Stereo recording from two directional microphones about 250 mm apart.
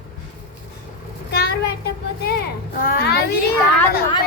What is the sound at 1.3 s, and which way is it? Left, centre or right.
Child singing, left.